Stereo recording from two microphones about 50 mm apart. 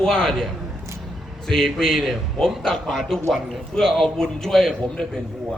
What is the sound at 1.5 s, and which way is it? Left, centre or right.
A man's voice, centre.